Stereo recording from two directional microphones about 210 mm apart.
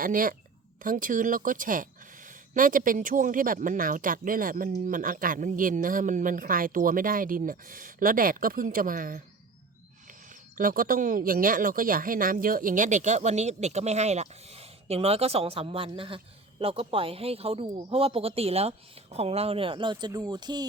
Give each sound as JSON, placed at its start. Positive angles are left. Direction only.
{"t": 0.0, "sound": "speech", "side_deg": -40}
{"t": 10.6, "sound": "speech", "side_deg": -40}